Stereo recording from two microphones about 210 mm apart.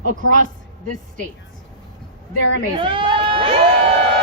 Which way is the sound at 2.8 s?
25° right (ahead or behind).